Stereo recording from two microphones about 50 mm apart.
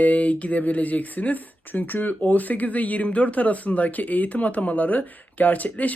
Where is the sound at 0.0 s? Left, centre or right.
Left.